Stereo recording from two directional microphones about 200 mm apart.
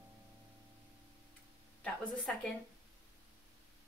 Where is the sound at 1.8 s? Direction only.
5° left (ahead or behind).